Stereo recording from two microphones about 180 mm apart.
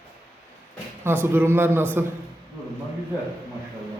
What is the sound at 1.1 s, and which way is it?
Speech, 10° right (ahead or behind).